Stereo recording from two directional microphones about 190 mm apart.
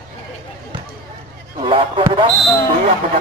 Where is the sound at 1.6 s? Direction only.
25° right (ahead or behind).